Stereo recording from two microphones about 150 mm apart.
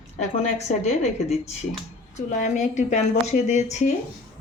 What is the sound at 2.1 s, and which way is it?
Speech, 55° left (ahead or behind).